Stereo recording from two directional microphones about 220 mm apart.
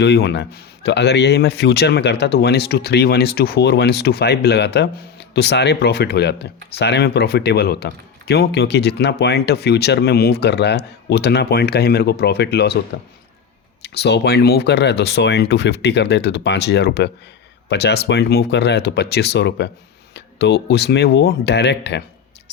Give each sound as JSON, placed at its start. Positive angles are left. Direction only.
{"t": 0.0, "sound": "a man's voice", "side_deg": 50}
{"t": 13.8, "sound": "a man's voice", "side_deg": 50}